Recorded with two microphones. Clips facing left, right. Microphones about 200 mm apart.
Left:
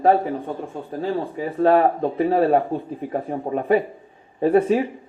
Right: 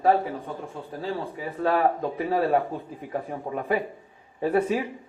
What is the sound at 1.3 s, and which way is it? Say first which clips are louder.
Speech: left 8 dB; 35° left (ahead or behind).